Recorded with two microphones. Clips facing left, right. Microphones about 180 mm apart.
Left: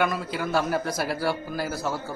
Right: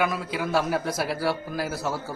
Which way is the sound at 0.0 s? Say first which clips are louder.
Even; centre (ahead or behind).